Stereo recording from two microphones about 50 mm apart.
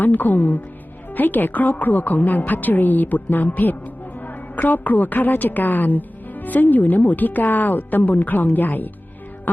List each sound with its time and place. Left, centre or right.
0.0 s a woman's voice: left